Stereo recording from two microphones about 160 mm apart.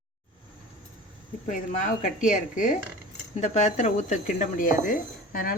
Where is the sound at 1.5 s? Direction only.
50° left (ahead or behind).